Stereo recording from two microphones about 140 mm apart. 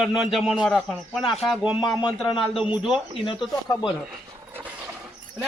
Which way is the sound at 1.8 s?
30° left (ahead or behind).